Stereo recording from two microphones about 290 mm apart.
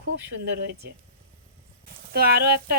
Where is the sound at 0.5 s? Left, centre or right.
Right.